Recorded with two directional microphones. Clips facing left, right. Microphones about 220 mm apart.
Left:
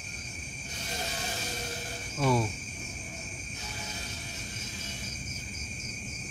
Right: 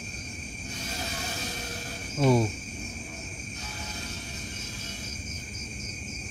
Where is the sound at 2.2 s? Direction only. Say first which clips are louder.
Right 5 dB; 25° right (ahead or behind).